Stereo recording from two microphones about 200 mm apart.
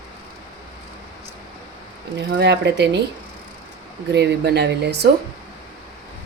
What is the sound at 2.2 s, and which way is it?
Speech, 65° right (ahead or behind).